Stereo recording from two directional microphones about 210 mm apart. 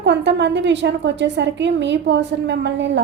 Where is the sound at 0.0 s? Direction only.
55° right (ahead or behind).